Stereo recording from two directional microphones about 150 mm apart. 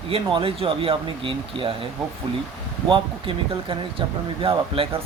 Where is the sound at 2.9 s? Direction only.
35° right (ahead or behind).